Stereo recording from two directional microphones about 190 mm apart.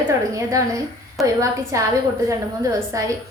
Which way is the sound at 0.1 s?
15° right (ahead or behind).